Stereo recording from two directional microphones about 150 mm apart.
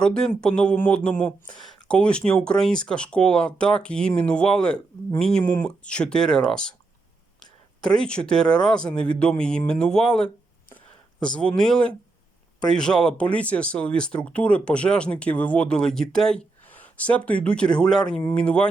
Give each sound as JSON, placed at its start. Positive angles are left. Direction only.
{"t": 0.0, "sound": "speech", "side_deg": 5}
{"t": 7.9, "sound": "speech", "side_deg": 5}